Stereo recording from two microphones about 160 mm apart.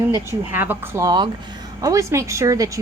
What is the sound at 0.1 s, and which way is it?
A woman's voice, 15° right (ahead or behind).